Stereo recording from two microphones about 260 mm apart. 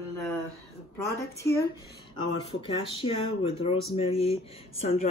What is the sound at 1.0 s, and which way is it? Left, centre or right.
Speech, centre.